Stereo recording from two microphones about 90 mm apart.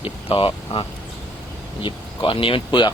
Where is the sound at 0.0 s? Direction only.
90° left.